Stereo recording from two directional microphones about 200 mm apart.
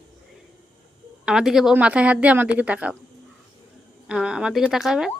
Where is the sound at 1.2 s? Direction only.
5° right (ahead or behind).